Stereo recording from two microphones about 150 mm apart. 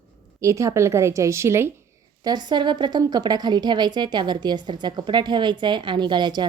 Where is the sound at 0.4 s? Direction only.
20° right (ahead or behind).